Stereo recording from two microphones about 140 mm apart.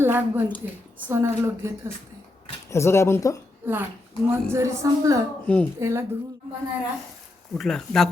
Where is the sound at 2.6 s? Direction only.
20° left (ahead or behind).